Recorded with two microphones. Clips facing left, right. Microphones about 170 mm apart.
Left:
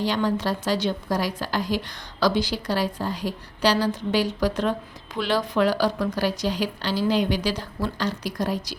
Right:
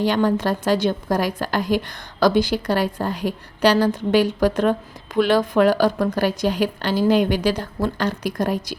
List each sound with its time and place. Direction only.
0.0 s a woman's voice: 55° right (ahead or behind)